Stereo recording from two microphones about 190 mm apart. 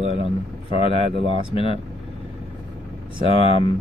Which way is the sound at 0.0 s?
30° left (ahead or behind).